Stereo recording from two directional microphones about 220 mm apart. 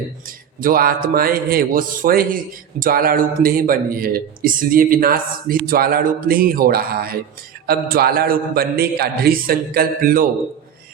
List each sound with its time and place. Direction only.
0.3 s a man's voice: 40° right (ahead or behind)